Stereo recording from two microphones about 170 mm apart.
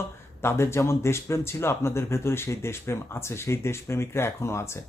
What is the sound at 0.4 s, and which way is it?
Speech, 15° left (ahead or behind).